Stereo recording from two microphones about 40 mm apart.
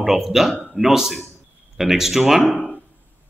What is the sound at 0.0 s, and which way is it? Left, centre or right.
Speech, centre.